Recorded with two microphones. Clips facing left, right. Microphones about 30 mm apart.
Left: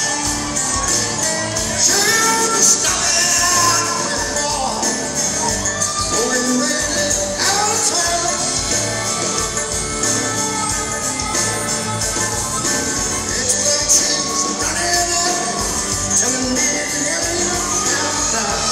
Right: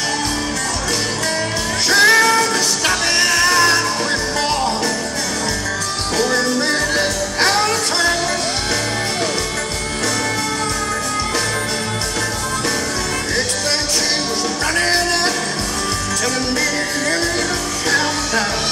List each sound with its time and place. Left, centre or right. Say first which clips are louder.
1.9 s music: right 6 dB; right
7.0 s music: right 2 dB; right